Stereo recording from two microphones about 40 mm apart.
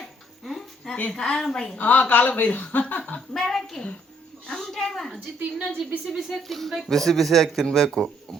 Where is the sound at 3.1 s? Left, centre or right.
Centre.